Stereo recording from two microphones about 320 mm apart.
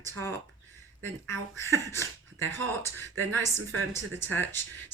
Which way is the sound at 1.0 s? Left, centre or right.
Centre.